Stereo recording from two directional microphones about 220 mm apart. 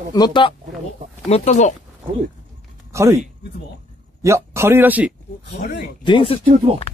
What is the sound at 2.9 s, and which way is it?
Speech, 15° right (ahead or behind).